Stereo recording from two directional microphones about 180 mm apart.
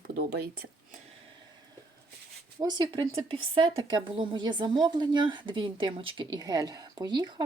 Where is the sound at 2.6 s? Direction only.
25° right (ahead or behind).